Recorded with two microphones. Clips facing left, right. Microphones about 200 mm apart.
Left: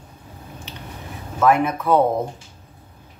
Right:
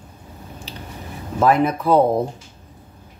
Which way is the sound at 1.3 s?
35° right (ahead or behind).